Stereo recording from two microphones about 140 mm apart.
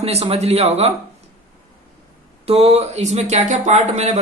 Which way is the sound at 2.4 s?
50° right (ahead or behind).